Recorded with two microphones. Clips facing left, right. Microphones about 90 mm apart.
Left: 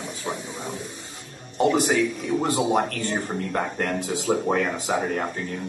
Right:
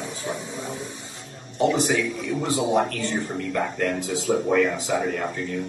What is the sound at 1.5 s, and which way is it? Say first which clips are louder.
Speech: left 1 dB; 45° left (ahead or behind).